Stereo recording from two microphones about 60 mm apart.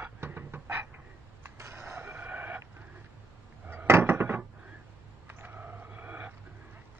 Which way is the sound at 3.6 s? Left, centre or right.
Right.